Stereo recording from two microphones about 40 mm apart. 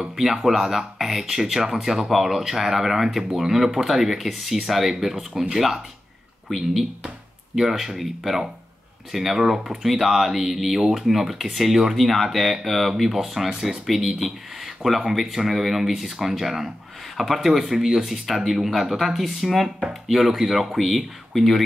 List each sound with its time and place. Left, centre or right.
0.1 s speech: centre